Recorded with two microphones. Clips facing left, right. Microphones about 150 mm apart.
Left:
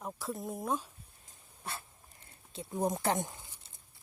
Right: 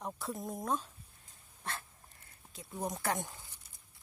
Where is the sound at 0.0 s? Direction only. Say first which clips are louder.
Left 1 dB; centre (ahead or behind).